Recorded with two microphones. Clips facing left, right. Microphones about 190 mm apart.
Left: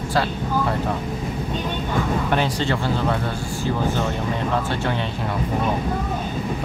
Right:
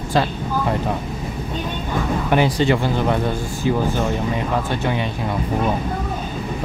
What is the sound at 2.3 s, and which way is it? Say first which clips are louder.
Speech: right 8 dB; 15° right (ahead or behind).